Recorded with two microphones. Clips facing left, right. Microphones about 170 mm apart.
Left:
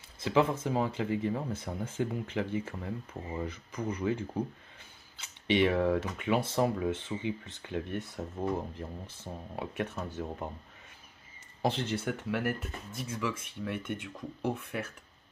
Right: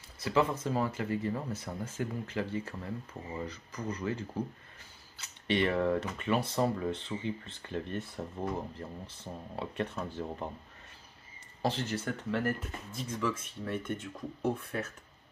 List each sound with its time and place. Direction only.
0.2 s speech: 15° left (ahead or behind)
5.5 s speech: 15° left (ahead or behind)
11.6 s speech: 20° left (ahead or behind)